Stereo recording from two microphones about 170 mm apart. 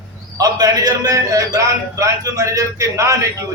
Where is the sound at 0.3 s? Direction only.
20° right (ahead or behind).